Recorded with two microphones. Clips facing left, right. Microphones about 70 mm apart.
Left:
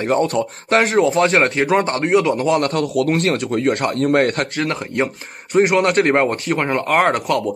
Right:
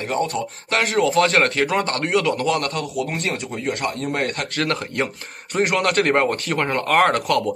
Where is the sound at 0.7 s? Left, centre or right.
Left.